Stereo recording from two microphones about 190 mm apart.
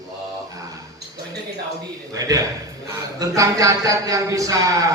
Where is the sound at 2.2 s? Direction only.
20° right (ahead or behind).